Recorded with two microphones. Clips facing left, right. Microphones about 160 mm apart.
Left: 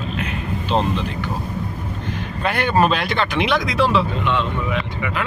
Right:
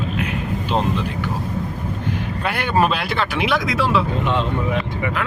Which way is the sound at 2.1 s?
10° right (ahead or behind).